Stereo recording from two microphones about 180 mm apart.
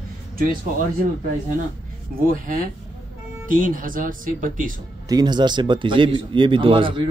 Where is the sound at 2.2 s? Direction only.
50° right (ahead or behind).